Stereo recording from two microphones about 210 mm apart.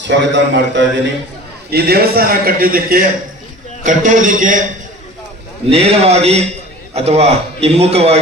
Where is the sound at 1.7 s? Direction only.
45° right (ahead or behind).